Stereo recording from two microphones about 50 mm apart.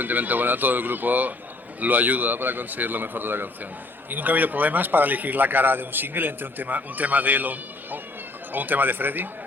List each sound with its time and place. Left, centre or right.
0.0 s speech: right